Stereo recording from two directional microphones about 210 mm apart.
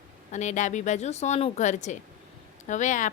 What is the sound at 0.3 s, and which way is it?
Speech, 35° left (ahead or behind).